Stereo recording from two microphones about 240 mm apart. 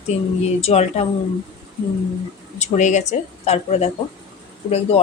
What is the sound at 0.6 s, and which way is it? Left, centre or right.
Speech, left.